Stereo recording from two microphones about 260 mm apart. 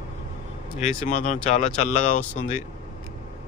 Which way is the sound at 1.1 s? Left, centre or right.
Left.